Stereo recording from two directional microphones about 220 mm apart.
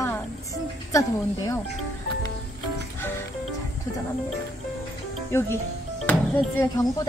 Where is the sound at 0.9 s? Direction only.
15° left (ahead or behind).